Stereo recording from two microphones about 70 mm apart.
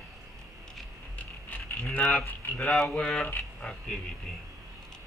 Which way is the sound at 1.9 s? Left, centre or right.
Centre.